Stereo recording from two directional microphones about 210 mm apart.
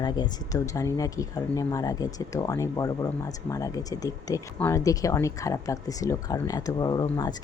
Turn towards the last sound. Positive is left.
turn(degrees=20)  # may be behind; listen again after turning